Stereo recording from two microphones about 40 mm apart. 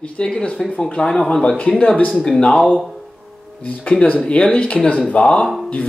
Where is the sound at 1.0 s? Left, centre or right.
Centre.